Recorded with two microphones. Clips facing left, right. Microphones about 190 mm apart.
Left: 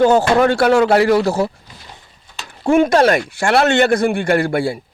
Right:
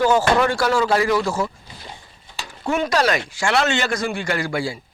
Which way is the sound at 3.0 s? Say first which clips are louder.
Left 6 dB; 50° left (ahead or behind).